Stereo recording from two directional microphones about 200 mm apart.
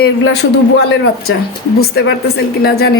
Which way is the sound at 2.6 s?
55° left (ahead or behind).